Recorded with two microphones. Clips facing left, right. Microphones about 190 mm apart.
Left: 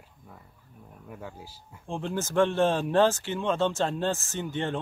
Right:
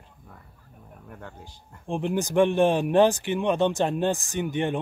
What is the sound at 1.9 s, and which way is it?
Speech, 15° right (ahead or behind).